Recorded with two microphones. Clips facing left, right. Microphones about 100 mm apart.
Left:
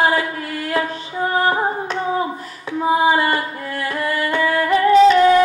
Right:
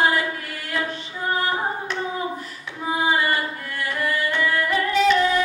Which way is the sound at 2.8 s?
30° left (ahead or behind).